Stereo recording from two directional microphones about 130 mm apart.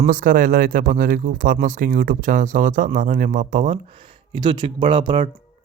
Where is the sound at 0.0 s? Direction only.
90° right; by 3.8 s 75° right (ahead or behind).